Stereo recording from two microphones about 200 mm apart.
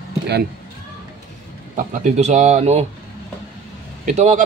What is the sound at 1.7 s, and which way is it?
Speech, 35° right (ahead or behind).